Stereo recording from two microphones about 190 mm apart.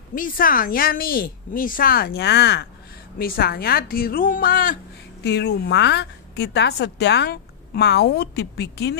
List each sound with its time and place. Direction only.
0.1 s a woman's voice: 45° left (ahead or behind)
5.2 s a woman's voice: 65° left (ahead or behind)